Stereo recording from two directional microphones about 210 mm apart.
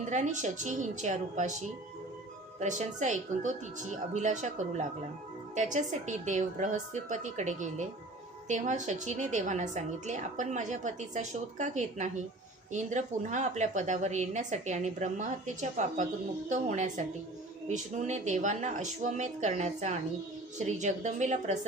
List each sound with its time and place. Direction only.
0.1 s a woman's voice: 35° right (ahead or behind)
2.6 s a woman's voice: 35° right (ahead or behind)